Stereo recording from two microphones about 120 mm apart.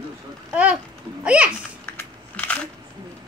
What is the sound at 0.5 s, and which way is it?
Speech, 10° right (ahead or behind).